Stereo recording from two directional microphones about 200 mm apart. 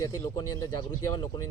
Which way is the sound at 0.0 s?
15° left (ahead or behind).